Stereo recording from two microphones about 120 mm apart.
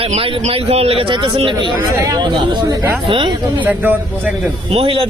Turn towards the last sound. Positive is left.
turn(degrees=-50)  # may be behind; listen again after turning